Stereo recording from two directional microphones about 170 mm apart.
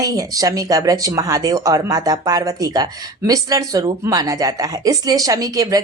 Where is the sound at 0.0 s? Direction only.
20° right (ahead or behind).